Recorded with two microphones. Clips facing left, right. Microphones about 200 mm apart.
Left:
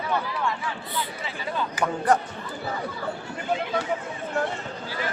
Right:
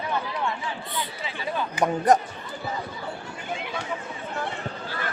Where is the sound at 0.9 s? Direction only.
20° right (ahead or behind).